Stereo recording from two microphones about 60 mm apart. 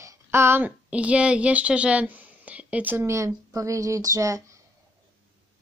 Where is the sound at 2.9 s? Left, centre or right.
Right.